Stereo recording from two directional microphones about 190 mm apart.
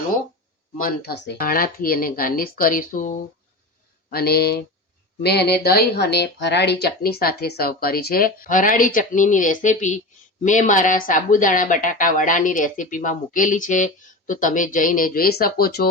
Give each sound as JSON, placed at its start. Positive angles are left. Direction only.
{"t": 0.8, "sound": "speech", "side_deg": 50}
{"t": 4.1, "sound": "speech", "side_deg": 55}